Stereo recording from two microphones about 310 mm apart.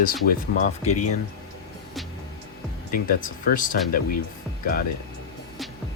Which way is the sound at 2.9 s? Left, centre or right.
Left.